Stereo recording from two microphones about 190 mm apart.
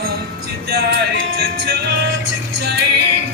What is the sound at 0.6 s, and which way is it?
Music, 60° right (ahead or behind).